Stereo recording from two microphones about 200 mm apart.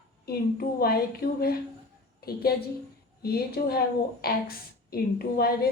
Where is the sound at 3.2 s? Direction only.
50° left (ahead or behind).